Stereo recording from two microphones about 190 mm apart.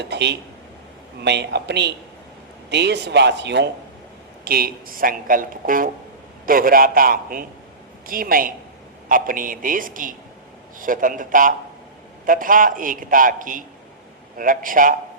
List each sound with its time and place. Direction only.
0.0 s speech: 60° right (ahead or behind)
4.4 s speech: 50° right (ahead or behind)